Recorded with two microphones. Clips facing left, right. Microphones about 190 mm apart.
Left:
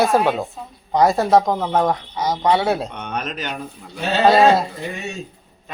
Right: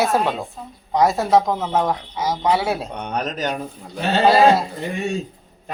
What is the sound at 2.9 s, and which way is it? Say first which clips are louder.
Speech: right 2 dB; 35° right (ahead or behind).